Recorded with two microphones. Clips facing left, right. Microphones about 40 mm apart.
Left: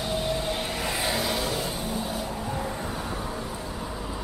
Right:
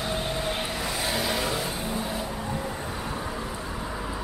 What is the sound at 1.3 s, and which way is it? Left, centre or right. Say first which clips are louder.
Vehicle: right 1 dB; right.